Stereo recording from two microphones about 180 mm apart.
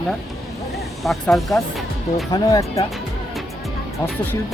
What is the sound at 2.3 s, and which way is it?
Speech, 20° left (ahead or behind).